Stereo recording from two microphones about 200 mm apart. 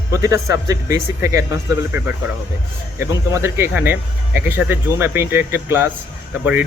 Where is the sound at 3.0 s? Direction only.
15° right (ahead or behind).